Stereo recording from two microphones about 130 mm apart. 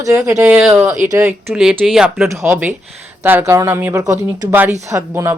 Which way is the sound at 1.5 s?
5° right (ahead or behind).